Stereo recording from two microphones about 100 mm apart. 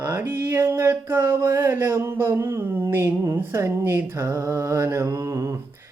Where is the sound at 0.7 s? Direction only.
25° right (ahead or behind).